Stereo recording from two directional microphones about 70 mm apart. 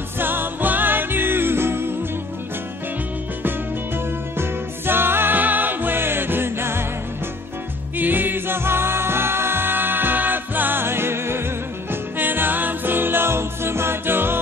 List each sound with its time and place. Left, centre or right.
0.2 s music: right
3.4 s music: right
8.0 s music: right